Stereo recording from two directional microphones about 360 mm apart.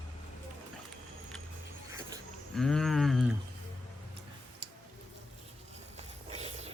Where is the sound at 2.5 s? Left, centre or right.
Centre.